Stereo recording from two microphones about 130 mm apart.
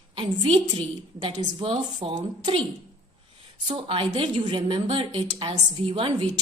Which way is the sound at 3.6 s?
40° right (ahead or behind).